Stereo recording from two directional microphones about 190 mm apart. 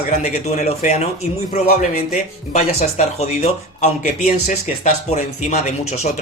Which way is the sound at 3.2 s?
35° left (ahead or behind).